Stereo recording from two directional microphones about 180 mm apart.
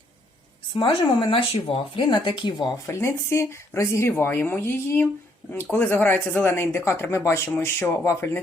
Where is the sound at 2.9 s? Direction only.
15° left (ahead or behind).